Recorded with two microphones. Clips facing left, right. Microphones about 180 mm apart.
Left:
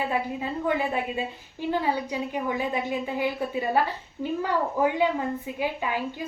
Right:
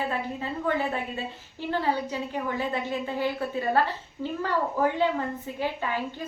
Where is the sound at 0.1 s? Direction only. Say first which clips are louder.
Left 3 dB; 15° left (ahead or behind).